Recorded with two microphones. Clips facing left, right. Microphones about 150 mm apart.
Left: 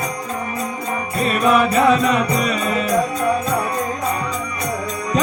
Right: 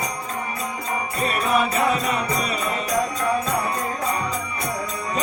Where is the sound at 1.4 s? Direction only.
90° left.